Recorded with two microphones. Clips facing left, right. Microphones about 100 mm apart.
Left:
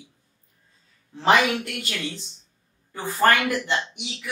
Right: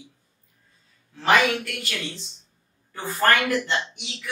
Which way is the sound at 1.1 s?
25° left (ahead or behind).